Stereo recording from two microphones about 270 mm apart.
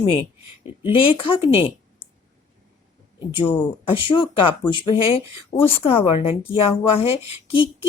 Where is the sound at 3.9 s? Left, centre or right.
Centre.